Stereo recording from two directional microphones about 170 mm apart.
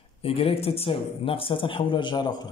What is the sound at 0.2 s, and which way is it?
Speech, 35° left (ahead or behind).